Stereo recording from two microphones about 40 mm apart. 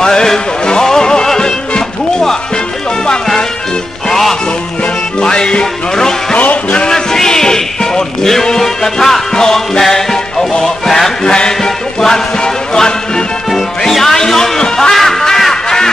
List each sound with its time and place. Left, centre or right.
0.0 s music: centre
4.1 s music: centre
6.3 s music: left
6.9 s music: centre
11.2 s music: centre
13.5 s music: centre